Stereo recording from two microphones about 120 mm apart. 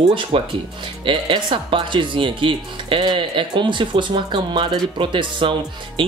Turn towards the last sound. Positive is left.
turn(degrees=-45)  # may be behind; listen again after turning